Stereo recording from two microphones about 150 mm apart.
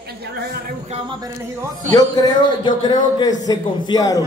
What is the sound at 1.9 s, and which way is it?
A man's voice, 25° left (ahead or behind).